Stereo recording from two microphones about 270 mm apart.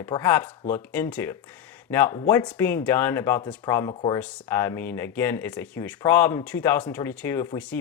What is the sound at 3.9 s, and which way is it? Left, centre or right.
Speech, left.